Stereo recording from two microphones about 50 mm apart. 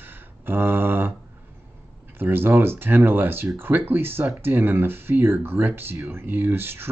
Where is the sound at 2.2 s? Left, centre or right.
Right.